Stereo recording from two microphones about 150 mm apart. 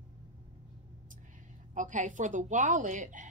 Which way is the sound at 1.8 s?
55° right (ahead or behind).